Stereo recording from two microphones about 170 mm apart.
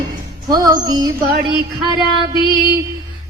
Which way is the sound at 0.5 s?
25° right (ahead or behind).